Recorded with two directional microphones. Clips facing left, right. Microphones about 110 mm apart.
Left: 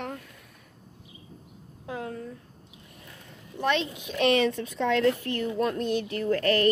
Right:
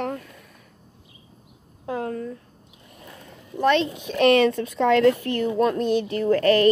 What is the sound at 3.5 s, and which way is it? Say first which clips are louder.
Speech: right 7 dB; 40° right (ahead or behind).